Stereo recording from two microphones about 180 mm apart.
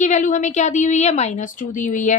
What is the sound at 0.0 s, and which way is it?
A woman's voice, 45° left (ahead or behind).